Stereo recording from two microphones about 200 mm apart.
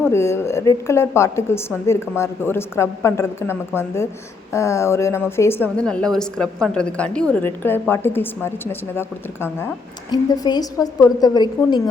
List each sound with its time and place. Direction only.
0.0 s a woman's voice: 15° left (ahead or behind)